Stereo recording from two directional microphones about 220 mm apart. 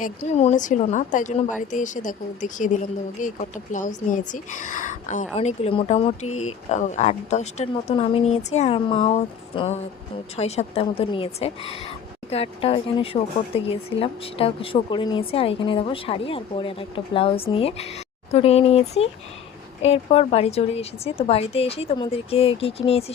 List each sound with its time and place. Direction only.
0.0 s a woman's voice: 30° left (ahead or behind)